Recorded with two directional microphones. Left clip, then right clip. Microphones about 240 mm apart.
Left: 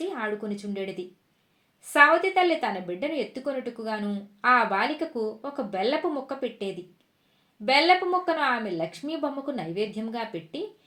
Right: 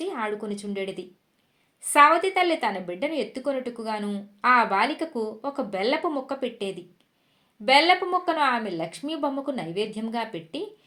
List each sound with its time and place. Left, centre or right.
0.0 s a woman's voice: right